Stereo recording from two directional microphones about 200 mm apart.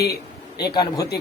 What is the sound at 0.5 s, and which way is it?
Speech, 20° left (ahead or behind).